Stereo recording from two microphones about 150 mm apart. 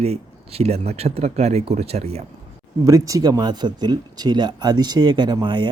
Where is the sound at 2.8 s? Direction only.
20° right (ahead or behind).